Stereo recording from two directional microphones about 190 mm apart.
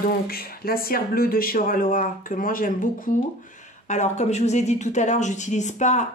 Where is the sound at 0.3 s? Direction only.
50° left (ahead or behind).